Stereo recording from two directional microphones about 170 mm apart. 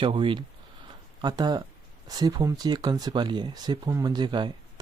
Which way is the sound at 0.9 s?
25° right (ahead or behind).